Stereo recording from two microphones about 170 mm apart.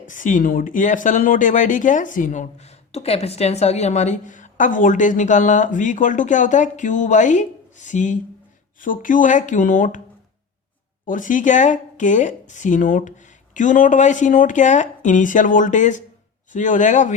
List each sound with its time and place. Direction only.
0.0 s a woman's voice: 50° left (ahead or behind)
11.0 s a woman's voice: 50° left (ahead or behind)